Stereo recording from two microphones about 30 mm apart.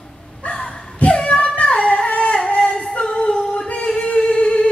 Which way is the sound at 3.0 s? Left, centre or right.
Left.